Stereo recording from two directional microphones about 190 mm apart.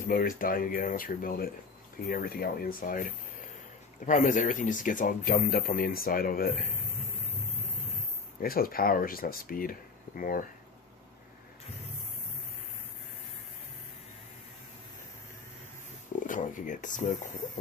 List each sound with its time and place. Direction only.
0.1 s speech: 50° left (ahead or behind)
8.4 s speech: 50° left (ahead or behind)
16.2 s a sound: 40° left (ahead or behind)